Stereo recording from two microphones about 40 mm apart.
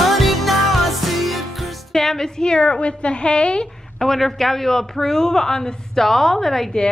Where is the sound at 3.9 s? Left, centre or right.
Centre.